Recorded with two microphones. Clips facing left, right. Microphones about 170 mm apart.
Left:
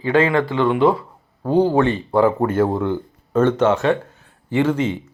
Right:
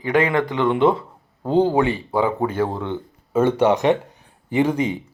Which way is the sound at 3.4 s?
10° right (ahead or behind).